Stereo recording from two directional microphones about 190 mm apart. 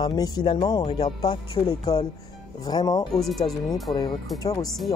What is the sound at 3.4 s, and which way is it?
Speech, 20° left (ahead or behind).